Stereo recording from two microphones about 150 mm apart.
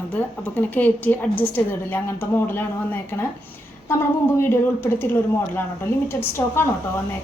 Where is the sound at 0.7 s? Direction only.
10° left (ahead or behind).